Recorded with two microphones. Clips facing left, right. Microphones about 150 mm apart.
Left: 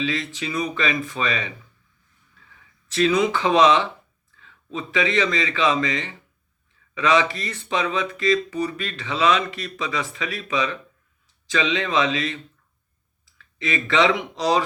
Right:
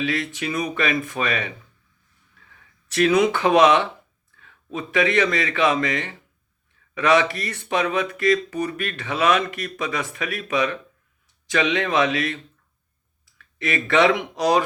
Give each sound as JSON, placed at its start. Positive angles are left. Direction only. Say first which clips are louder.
{"t": 0.0, "sound": "speech", "louder": "right 1 dB", "side_deg": -60}
{"t": 2.9, "sound": "a man's voice", "louder": "right 2 dB", "side_deg": -60}